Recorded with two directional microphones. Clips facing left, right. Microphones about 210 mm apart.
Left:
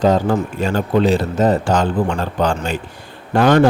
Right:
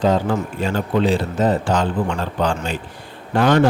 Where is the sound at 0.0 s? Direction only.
40° left (ahead or behind).